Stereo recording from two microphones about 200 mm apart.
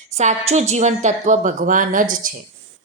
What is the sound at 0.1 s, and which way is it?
Speech, 35° right (ahead or behind).